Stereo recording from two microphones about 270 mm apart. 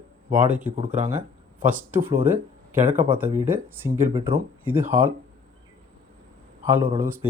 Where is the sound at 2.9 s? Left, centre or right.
Right.